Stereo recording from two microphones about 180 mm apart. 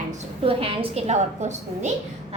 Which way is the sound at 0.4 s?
30° right (ahead or behind).